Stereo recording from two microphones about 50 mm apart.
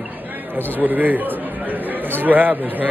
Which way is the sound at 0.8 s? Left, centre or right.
Right.